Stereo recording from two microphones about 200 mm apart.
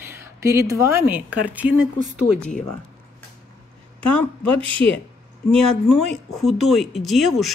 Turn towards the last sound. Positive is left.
turn(degrees=0)  # may be behind; listen again after turning